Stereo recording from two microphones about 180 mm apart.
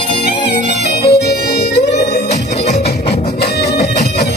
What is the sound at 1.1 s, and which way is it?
Harmonica, 65° left (ahead or behind).